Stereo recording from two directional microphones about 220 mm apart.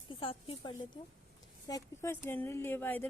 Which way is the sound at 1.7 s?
15° left (ahead or behind).